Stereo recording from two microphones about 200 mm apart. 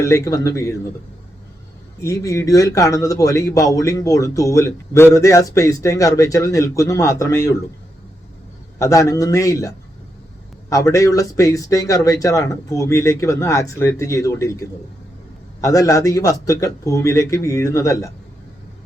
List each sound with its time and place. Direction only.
0.0 s a man's voice: 15° left (ahead or behind)
2.0 s a man's voice: 15° left (ahead or behind)
8.8 s a man's voice: 15° left (ahead or behind)
15.6 s a man's voice: 15° left (ahead or behind)